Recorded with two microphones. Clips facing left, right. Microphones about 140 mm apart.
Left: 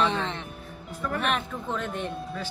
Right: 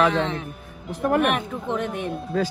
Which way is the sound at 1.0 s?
60° right (ahead or behind).